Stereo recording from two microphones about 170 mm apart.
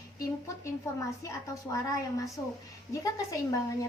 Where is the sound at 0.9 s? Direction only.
15° left (ahead or behind).